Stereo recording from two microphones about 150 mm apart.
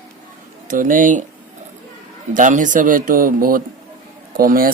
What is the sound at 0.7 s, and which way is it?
Speech, 60° right (ahead or behind).